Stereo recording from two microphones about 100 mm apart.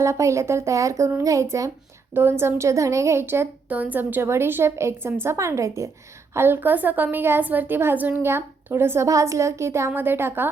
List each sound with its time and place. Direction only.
0.0 s a woman's voice: 30° right (ahead or behind)